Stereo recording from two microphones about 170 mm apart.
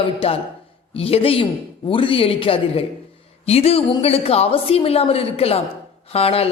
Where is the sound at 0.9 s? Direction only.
35° left (ahead or behind).